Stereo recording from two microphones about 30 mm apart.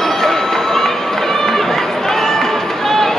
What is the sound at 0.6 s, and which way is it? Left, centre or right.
Run, centre.